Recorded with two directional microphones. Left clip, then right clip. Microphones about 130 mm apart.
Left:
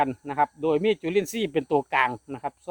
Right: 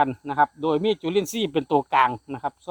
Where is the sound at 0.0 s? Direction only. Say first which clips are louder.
Right 3 dB; 10° right (ahead or behind).